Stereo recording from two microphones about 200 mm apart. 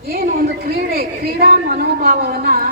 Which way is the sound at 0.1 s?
50° right (ahead or behind).